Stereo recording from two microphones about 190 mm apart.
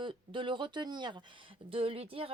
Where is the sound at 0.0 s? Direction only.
25° right (ahead or behind).